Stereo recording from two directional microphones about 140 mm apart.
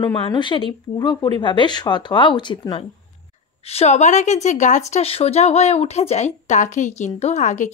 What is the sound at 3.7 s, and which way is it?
Speech, 50° left (ahead or behind).